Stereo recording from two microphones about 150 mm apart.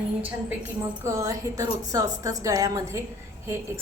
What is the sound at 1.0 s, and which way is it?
A woman's voice, 20° right (ahead or behind).